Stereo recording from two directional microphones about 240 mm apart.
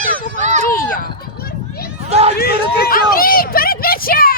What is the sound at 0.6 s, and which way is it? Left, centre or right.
Children playing, left.